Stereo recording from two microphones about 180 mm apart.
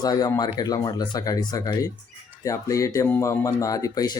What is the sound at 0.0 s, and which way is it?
Speech, 20° left (ahead or behind).